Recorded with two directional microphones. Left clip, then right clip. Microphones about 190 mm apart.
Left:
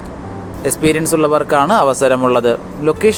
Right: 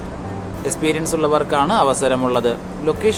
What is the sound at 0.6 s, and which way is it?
Speech, 30° left (ahead or behind).